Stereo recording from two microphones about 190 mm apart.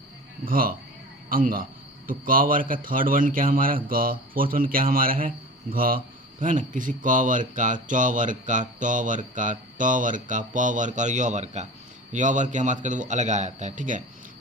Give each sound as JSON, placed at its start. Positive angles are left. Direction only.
{"t": 0.4, "sound": "a man's voice", "side_deg": -50}